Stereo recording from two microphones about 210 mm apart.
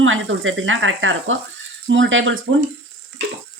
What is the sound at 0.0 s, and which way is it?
Speech, 70° right (ahead or behind).